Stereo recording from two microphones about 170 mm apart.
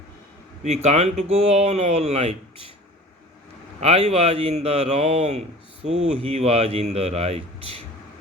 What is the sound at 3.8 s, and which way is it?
Speech, 35° right (ahead or behind).